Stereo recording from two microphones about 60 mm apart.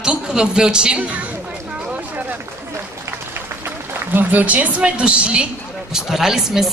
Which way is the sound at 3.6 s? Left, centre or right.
Right.